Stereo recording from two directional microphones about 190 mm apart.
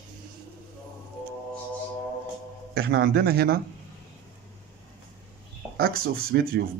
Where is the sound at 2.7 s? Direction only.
55° right (ahead or behind).